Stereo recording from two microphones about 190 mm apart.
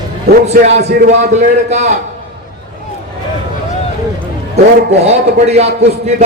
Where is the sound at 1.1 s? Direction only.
35° right (ahead or behind).